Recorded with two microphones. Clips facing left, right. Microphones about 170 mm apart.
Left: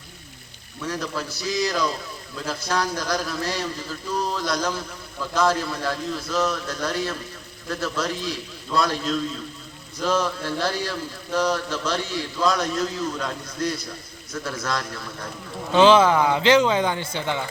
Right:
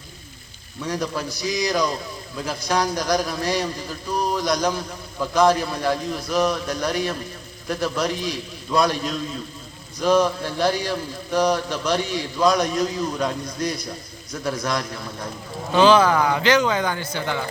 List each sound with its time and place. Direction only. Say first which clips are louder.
0.9 s a man's voice: right 3 dB; 15° right (ahead or behind)
15.7 s speech: even; 25° left (ahead or behind)